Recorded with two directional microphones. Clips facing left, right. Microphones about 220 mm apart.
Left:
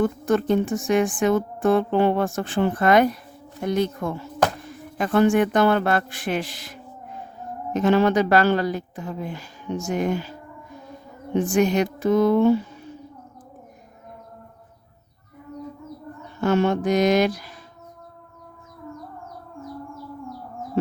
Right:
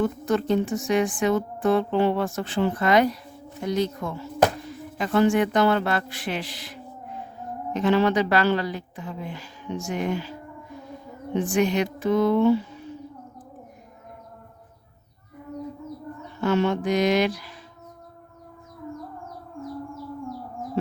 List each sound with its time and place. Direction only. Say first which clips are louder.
0.0 s speech: left 3 dB; 50° left (ahead or behind)
11.5 s speech: left 2 dB; 45° left (ahead or behind)
16.4 s speech: left 2 dB; 45° left (ahead or behind)